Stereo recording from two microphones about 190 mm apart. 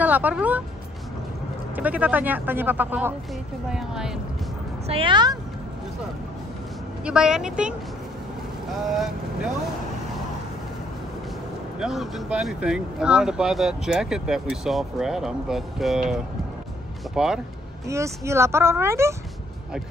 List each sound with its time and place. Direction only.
0.0 s speech: 10° right (ahead or behind)
1.8 s speech: 5° right (ahead or behind)
4.8 s speech: 30° right (ahead or behind)
7.1 s speech: 5° right (ahead or behind)
11.8 s speech: centre (ahead or behind)
17.8 s speech: 15° right (ahead or behind)